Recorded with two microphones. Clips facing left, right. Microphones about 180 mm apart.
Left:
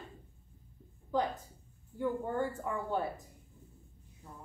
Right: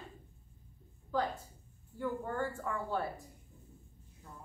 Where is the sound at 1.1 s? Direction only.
20° left (ahead or behind).